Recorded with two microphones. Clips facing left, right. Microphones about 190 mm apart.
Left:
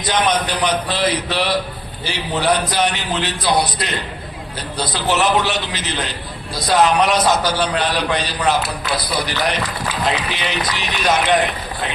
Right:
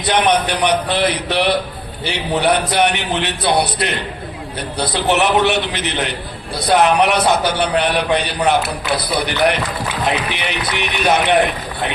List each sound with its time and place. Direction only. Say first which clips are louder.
0.0 s a man's voice: right 3 dB; 65° right (ahead or behind)
5.1 s a man's voice: right 3 dB; 60° right (ahead or behind)